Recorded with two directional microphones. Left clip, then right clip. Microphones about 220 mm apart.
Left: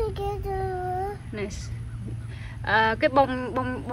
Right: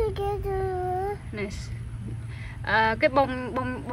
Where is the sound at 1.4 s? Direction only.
Centre (ahead or behind).